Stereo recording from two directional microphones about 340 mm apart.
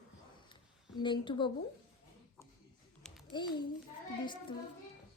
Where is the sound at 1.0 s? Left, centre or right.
Centre.